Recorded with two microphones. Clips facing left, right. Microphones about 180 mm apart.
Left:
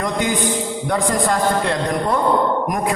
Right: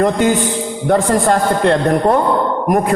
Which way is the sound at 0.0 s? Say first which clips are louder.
Right 7 dB; 50° right (ahead or behind).